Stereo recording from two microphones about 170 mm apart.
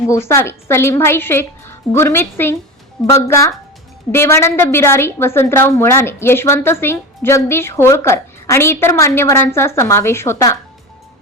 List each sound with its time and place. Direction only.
0.1 s a woman's voice: 15° left (ahead or behind)